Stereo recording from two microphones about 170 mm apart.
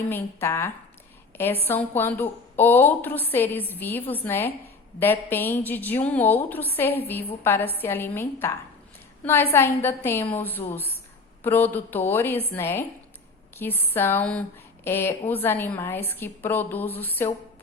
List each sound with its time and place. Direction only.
0.1 s a woman's voice: 15° left (ahead or behind)